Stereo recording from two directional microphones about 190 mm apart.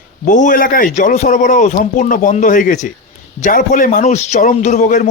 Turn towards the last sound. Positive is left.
turn(degrees=40)  # may be behind; listen again after turning